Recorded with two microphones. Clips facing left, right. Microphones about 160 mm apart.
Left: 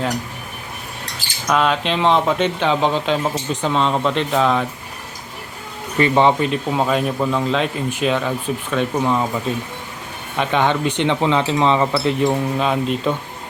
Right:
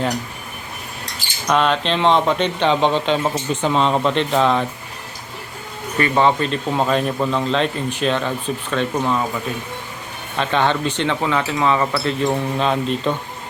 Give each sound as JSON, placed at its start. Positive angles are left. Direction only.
{"t": 1.5, "sound": "speech", "side_deg": 5}
{"t": 6.0, "sound": "a man's voice", "side_deg": 20}
{"t": 10.3, "sound": "a man's voice", "side_deg": 15}
{"t": 12.3, "sound": "speech", "side_deg": 5}